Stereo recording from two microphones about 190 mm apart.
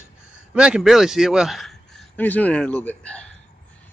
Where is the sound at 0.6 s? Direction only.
5° right (ahead or behind).